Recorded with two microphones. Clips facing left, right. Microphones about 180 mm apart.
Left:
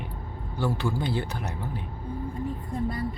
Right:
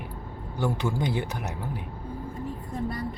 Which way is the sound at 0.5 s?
15° right (ahead or behind).